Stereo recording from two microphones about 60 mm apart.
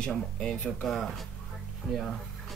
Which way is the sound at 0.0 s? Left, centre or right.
Centre.